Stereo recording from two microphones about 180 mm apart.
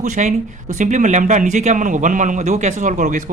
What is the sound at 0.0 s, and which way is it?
Speech, 45° right (ahead or behind).